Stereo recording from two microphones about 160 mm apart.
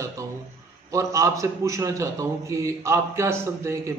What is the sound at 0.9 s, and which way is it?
A man's voice, 20° right (ahead or behind).